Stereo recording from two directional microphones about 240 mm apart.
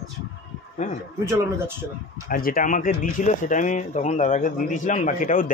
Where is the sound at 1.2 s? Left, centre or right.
Centre.